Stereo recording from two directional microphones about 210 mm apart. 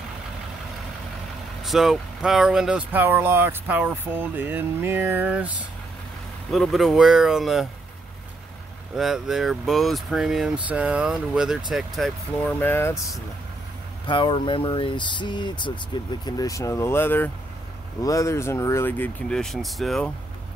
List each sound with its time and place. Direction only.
1.6 s speech: centre (ahead or behind)
6.5 s speech: centre (ahead or behind)
8.9 s speech: centre (ahead or behind)
14.0 s speech: 20° left (ahead or behind); by 20.1 s centre (ahead or behind)